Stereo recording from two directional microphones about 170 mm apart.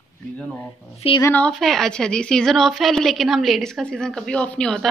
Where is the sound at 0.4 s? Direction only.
10° left (ahead or behind).